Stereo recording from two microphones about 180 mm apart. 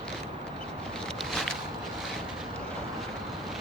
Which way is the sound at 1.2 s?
Centre (ahead or behind).